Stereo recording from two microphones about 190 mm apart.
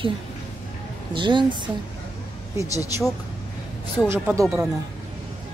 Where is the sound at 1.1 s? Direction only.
25° right (ahead or behind).